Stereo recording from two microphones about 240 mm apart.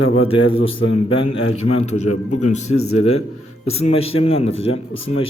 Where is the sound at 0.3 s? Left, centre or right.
Left.